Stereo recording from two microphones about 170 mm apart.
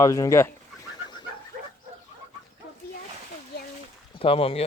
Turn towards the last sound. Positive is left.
turn(degrees=35)  # may be behind; listen again after turning